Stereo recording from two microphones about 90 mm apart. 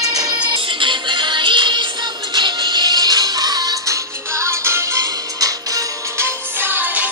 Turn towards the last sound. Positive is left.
turn(degrees=-20)  # may be behind; listen again after turning